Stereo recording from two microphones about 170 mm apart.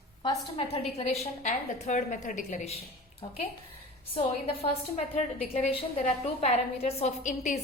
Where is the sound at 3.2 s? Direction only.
35° left (ahead or behind).